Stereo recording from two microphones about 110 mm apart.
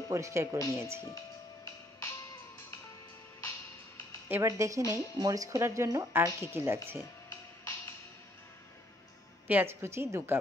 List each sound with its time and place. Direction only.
0.1 s speech: 25° right (ahead or behind)
1.0 s music: 25° left (ahead or behind)
4.3 s speech: 25° right (ahead or behind)
9.5 s speech: 20° right (ahead or behind)